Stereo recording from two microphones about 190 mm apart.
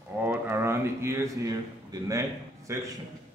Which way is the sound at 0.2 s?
15° right (ahead or behind).